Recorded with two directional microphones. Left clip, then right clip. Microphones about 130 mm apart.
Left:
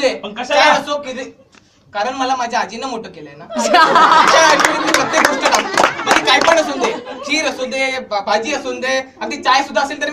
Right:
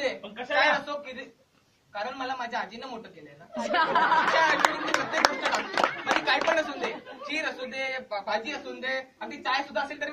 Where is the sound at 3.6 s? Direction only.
45° right (ahead or behind).